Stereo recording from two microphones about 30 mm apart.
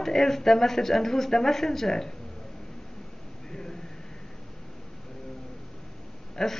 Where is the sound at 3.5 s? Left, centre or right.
Left.